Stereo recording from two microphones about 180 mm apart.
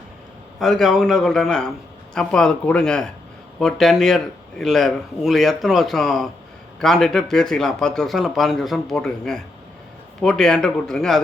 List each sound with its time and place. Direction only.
0.6 s a man's voice: centre (ahead or behind)